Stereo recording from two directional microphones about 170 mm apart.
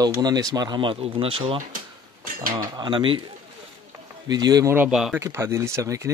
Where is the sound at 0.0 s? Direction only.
20° right (ahead or behind).